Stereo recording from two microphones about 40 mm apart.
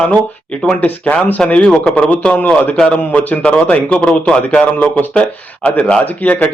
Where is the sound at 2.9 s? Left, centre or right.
Left.